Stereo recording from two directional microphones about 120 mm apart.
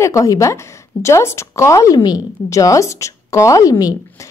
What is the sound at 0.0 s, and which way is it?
Speech, 30° left (ahead or behind).